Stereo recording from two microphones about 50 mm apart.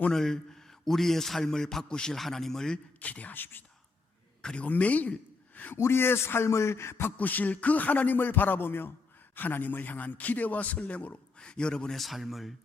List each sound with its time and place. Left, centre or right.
0.1 s a man's voice: centre
2.7 s a man's voice: left
4.4 s speech: left
5.7 s speech: left
7.2 s a man's voice: left; by 11.9 s centre
11.9 s speech: centre